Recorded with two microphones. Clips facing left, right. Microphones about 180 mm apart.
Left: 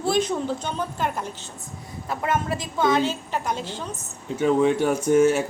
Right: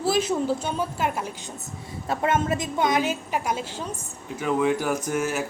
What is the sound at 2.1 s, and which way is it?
A woman's voice, 25° right (ahead or behind).